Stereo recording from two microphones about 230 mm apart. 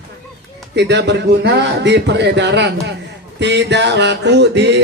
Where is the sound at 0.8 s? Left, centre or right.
Right.